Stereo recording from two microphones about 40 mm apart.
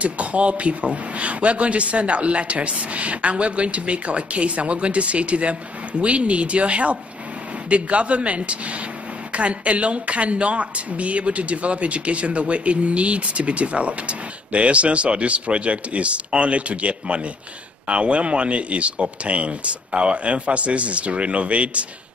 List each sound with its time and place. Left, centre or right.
0.0 s speech: right